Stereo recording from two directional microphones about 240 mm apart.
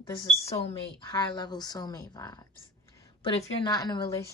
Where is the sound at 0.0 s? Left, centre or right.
Left.